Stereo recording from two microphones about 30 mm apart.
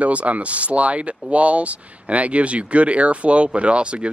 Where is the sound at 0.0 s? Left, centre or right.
Right.